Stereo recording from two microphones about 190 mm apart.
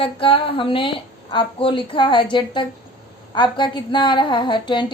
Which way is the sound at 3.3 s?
25° left (ahead or behind).